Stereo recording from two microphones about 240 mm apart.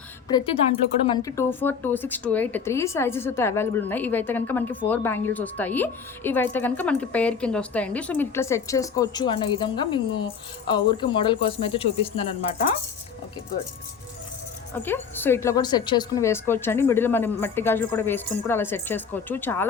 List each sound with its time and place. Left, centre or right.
0.3 s a woman's voice: centre
14.8 s a woman's voice: centre